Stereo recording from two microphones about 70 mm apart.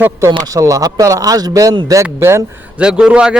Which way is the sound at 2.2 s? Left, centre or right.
Right.